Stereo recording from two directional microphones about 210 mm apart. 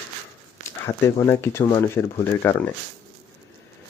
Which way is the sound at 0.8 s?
10° left (ahead or behind).